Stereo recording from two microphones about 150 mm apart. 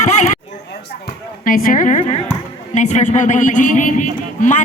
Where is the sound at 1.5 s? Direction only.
65° left (ahead or behind).